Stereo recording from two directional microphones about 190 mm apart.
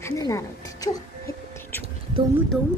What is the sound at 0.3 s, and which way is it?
Speech, 15° left (ahead or behind).